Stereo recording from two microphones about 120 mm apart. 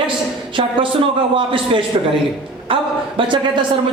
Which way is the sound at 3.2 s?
40° right (ahead or behind).